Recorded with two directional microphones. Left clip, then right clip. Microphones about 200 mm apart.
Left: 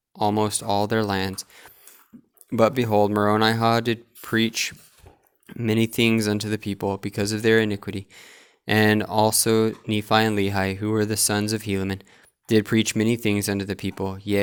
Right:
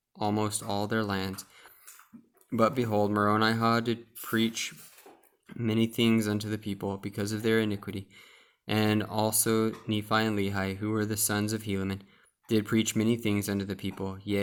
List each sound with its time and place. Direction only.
0.2 s speech: 35° left (ahead or behind)